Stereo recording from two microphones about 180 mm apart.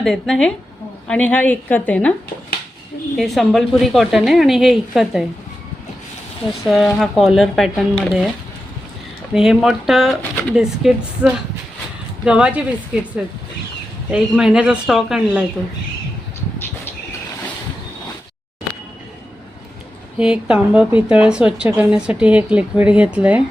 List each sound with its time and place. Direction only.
0.0 s a woman's voice: centre (ahead or behind)
3.2 s a woman's voice: centre (ahead or behind)
6.7 s a woman's voice: centre (ahead or behind)
9.3 s a woman's voice: centre (ahead or behind)
14.1 s a woman's voice: 5° right (ahead or behind)
20.1 s a woman's voice: 5° right (ahead or behind)